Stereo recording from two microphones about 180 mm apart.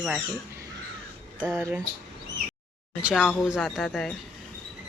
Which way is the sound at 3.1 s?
5° right (ahead or behind).